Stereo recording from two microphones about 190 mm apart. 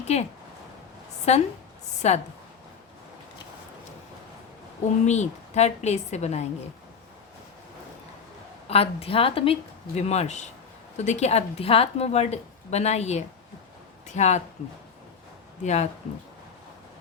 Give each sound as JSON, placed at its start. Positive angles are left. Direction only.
{"t": 0.1, "sound": "a woman's voice", "side_deg": 35}
{"t": 1.3, "sound": "a woman's voice", "side_deg": 35}
{"t": 5.0, "sound": "a woman's voice", "side_deg": 35}
{"t": 8.6, "sound": "a woman's voice", "side_deg": 30}
{"t": 15.6, "sound": "a woman's voice", "side_deg": 35}